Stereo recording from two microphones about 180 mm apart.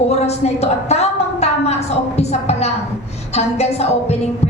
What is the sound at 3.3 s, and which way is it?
Speech, 35° left (ahead or behind).